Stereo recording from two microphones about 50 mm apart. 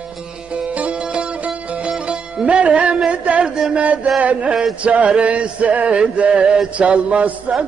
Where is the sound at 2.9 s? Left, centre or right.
Right.